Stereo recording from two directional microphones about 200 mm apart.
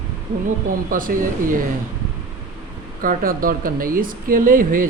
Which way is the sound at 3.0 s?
45° right (ahead or behind).